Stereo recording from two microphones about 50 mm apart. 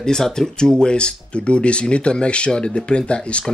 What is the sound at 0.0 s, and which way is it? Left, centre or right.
Speech, centre.